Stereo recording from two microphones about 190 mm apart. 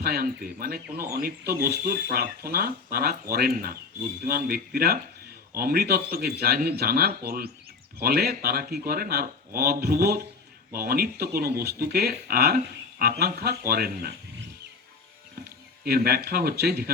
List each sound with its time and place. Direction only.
0.0 s speech: 50° right (ahead or behind)
15.8 s speech: 55° right (ahead or behind)